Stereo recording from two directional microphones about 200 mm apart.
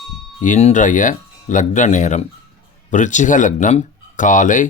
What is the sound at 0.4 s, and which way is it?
Speech, 40° left (ahead or behind).